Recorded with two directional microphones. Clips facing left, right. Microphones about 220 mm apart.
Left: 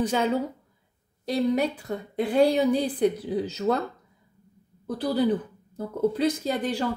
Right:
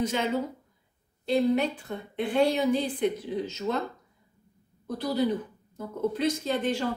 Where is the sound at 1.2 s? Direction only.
40° left (ahead or behind).